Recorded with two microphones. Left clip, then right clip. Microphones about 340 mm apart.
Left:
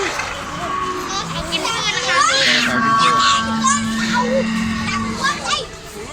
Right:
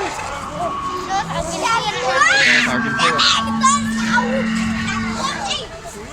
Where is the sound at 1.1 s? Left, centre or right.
Right.